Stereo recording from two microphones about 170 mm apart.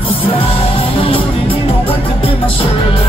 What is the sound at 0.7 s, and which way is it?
Music, 30° left (ahead or behind).